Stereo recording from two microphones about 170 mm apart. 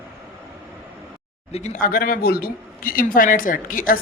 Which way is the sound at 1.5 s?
45° left (ahead or behind).